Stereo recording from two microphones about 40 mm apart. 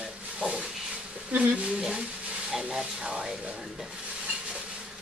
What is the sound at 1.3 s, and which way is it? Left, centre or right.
Speech, right.